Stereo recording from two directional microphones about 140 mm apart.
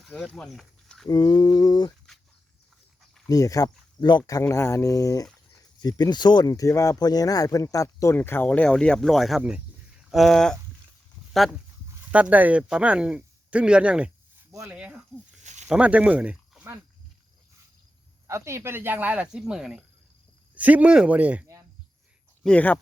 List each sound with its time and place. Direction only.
0.3 s speech: 5° left (ahead or behind)
1.0 s a sound: 30° left (ahead or behind)
3.2 s speech: 25° left (ahead or behind); by 10.6 s 5° left (ahead or behind)
12.1 s speech: 10° right (ahead or behind)
18.3 s speech: 20° right (ahead or behind)
22.4 s speech: 10° left (ahead or behind)